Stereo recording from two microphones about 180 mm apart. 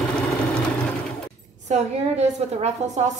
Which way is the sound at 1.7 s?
35° right (ahead or behind).